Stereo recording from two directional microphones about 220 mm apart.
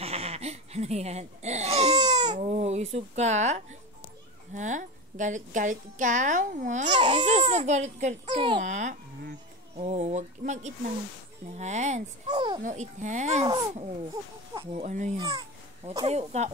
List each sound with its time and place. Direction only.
0.0 s baby cry: 30° right (ahead or behind)
2.3 s a woman's voice: 30° right (ahead or behind)
12.3 s speech: 20° right (ahead or behind)
12.6 s a woman's voice: 35° right (ahead or behind)
14.5 s speech: 25° right (ahead or behind)
15.2 s speech: 20° right (ahead or behind)